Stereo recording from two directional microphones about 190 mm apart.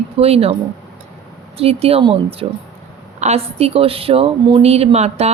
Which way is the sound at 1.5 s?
30° right (ahead or behind).